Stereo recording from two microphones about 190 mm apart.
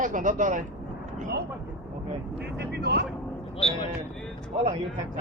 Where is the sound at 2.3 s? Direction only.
60° right (ahead or behind).